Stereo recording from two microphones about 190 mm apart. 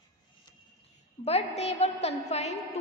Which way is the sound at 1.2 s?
30° left (ahead or behind).